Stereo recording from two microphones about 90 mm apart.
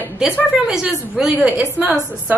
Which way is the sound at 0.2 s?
5° right (ahead or behind).